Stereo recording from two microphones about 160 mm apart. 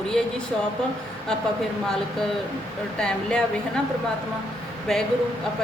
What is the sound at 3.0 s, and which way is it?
Speech, 5° left (ahead or behind).